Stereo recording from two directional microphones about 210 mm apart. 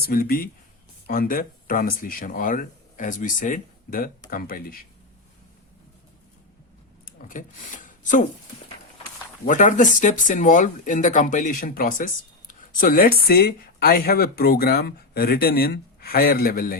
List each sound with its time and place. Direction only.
0.1 s speech: 45° left (ahead or behind)
7.0 s a sound: 40° left (ahead or behind)
9.4 s speech: 40° left (ahead or behind)